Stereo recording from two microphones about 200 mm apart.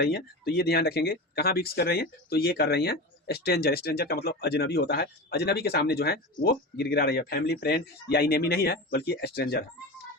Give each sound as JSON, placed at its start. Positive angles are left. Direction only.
{"t": 0.0, "sound": "speech", "side_deg": 55}